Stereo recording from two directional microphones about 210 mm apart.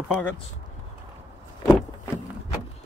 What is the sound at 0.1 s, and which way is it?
Speech, 10° left (ahead or behind).